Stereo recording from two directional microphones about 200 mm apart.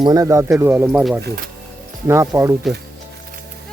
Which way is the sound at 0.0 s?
20° right (ahead or behind).